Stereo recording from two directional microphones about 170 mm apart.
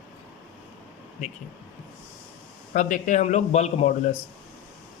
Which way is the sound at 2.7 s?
45° left (ahead or behind).